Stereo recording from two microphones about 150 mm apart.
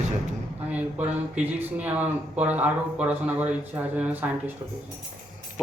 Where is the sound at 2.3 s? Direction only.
10° right (ahead or behind).